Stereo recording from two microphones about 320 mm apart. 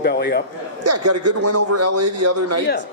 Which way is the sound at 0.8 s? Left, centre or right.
Right.